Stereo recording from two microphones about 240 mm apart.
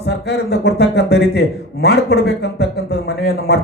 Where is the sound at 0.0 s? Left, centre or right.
Left.